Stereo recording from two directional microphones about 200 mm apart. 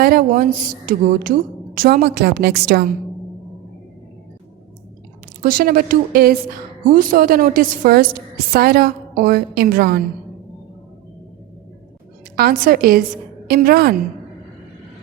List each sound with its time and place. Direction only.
0.0 s a woman's voice: 45° right (ahead or behind)
5.4 s a woman's voice: 45° right (ahead or behind)
12.4 s a woman's voice: 45° right (ahead or behind)